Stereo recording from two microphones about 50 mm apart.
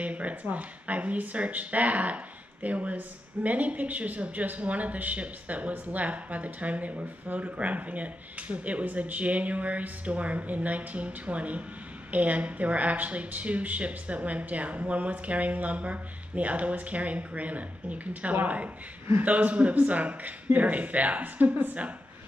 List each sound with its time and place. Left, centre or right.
0.0 s a woman's voice: right